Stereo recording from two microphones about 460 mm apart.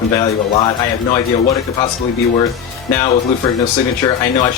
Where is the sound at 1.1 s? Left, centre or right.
Centre.